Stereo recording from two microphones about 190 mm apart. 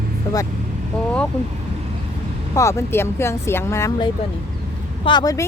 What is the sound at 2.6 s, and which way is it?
Speech, 15° left (ahead or behind).